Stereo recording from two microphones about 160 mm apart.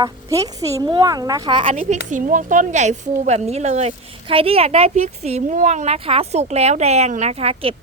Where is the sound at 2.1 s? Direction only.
55° right (ahead or behind).